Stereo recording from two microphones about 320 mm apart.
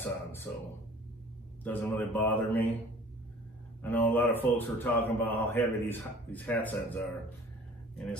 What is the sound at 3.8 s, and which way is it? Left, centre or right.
A man's voice, centre.